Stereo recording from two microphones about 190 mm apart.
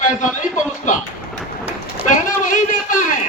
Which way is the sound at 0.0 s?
40° left (ahead or behind).